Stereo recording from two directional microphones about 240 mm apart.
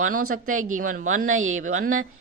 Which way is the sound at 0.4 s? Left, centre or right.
Right.